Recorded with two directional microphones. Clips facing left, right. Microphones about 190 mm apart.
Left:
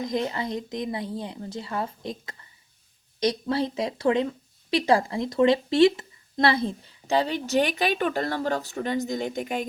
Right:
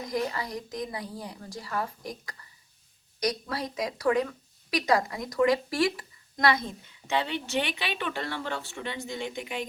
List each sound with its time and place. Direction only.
0.0 s a woman's voice: 25° left (ahead or behind); by 9.6 s 45° left (ahead or behind)